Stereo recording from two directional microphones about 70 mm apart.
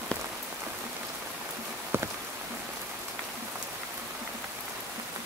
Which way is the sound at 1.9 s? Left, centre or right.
Right.